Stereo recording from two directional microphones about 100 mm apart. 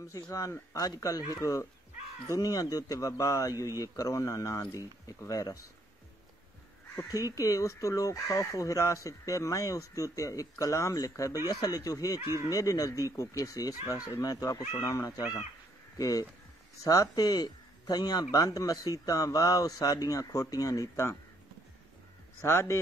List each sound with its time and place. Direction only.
0.0 s speech: 35° left (ahead or behind)
7.1 s speech: 35° left (ahead or behind)
22.4 s a man's voice: 25° left (ahead or behind)